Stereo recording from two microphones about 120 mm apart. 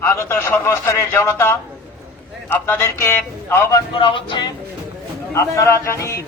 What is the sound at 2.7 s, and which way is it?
A man's voice, 20° left (ahead or behind).